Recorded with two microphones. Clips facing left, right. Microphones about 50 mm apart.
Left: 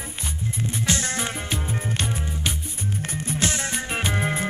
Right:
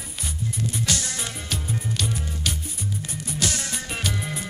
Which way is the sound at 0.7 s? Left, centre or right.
Left.